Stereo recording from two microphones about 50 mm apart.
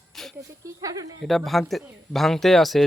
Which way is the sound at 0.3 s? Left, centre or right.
Right.